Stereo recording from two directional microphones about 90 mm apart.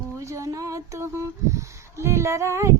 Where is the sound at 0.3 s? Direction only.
40° right (ahead or behind).